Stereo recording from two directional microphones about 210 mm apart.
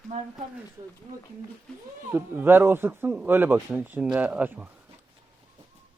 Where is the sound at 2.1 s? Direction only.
10° right (ahead or behind).